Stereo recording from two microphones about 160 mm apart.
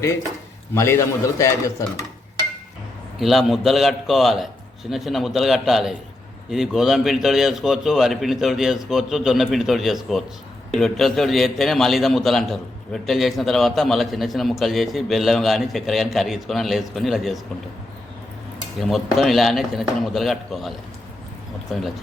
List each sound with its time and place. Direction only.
0.7 s a man's voice: 15° left (ahead or behind)
3.2 s a man's voice: centre (ahead or behind)
18.8 s a man's voice: centre (ahead or behind)